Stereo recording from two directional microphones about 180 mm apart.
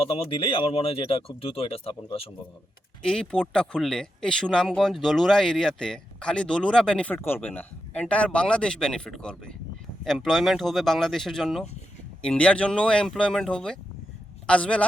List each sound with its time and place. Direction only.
0.0 s speech: 30° left (ahead or behind)
3.0 s a man's voice: 5° left (ahead or behind)